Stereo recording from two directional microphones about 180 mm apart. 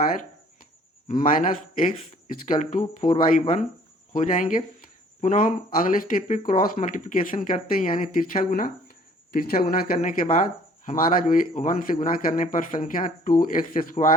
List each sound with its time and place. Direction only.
1.0 s speech: 45° left (ahead or behind)